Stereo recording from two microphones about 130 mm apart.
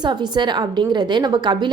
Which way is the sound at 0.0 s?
35° right (ahead or behind).